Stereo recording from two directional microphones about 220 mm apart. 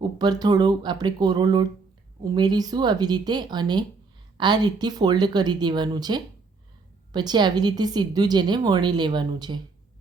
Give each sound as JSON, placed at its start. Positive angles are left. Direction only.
{"t": 0.2, "sound": "a woman's voice", "side_deg": -20}